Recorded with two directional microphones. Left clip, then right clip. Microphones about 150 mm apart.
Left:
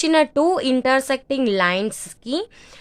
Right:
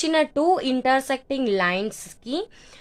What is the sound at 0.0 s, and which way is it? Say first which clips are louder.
A woman's voice: left 4 dB; 30° left (ahead or behind).